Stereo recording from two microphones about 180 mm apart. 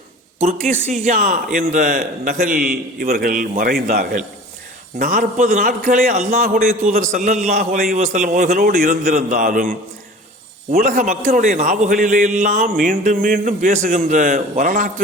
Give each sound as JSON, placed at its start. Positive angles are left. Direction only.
{"t": 0.4, "sound": "a man's voice", "side_deg": -45}
{"t": 3.8, "sound": "a man's voice", "side_deg": -45}
{"t": 6.4, "sound": "a man's voice", "side_deg": -55}
{"t": 9.0, "sound": "a man's voice", "side_deg": -40}
{"t": 10.8, "sound": "a man's voice", "side_deg": -50}